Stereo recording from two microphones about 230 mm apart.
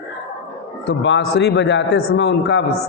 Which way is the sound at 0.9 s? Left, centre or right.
Left.